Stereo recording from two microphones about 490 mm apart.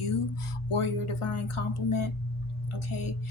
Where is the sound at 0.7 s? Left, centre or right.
Left.